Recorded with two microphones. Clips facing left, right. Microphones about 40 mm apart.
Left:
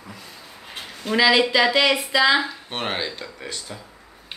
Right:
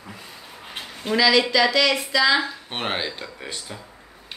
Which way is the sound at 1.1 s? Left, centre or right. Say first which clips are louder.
Left 1 dB; centre.